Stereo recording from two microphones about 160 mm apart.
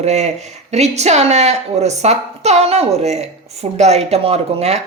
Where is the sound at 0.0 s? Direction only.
45° right (ahead or behind).